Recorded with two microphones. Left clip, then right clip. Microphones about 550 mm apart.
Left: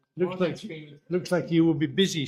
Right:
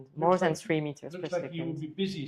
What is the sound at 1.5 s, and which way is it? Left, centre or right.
Speech, left.